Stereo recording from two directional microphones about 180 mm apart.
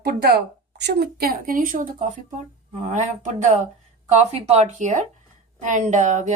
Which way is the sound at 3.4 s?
45° right (ahead or behind).